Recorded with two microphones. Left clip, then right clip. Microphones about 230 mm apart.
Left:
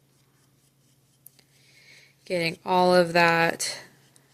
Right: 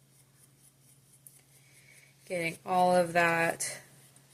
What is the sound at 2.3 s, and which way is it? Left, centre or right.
Speech, left.